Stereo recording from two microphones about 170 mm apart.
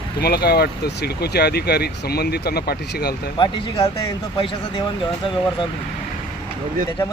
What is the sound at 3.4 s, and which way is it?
Speech, 35° left (ahead or behind).